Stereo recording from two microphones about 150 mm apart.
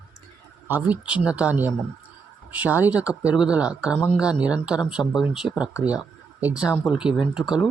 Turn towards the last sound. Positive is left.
turn(degrees=-5)  # may be behind; listen again after turning